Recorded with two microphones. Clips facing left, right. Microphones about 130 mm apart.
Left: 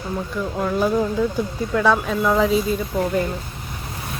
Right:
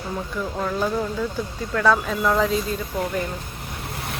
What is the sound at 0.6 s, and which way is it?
Speech, 10° left (ahead or behind).